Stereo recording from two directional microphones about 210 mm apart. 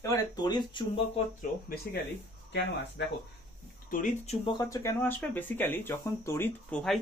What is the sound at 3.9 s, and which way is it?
Speech, 40° left (ahead or behind).